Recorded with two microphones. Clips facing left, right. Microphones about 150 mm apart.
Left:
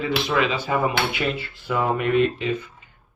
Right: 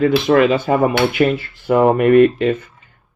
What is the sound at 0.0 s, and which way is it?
Speech, 50° right (ahead or behind).